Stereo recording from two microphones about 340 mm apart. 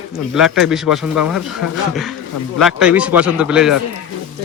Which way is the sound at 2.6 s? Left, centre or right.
Centre.